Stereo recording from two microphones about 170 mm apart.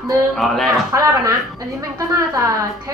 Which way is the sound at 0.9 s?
20° right (ahead or behind).